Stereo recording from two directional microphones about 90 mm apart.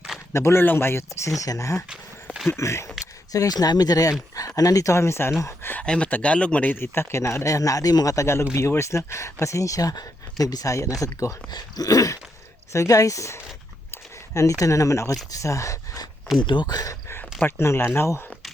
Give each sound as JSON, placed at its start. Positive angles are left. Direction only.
{"t": 0.3, "sound": "speech", "side_deg": 30}
{"t": 5.7, "sound": "speech", "side_deg": 10}
{"t": 13.9, "sound": "a sound", "side_deg": 35}
{"t": 14.6, "sound": "speech", "side_deg": 35}
{"t": 16.4, "sound": "speech", "side_deg": 60}